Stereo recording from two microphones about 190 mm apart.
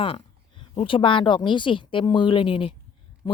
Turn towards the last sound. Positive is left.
turn(degrees=20)  # may be behind; listen again after turning